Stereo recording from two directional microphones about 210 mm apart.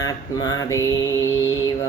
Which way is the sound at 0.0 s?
20° left (ahead or behind).